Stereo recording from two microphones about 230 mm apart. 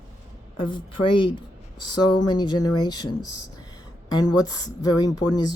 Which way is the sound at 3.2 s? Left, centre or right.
Left.